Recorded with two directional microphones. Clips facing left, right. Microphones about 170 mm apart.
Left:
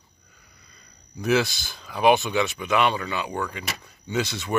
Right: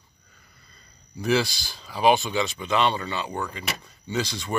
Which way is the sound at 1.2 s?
Centre (ahead or behind).